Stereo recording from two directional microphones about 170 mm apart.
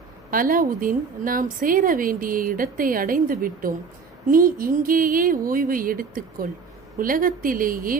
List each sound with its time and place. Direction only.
0.3 s a woman's voice: 55° right (ahead or behind)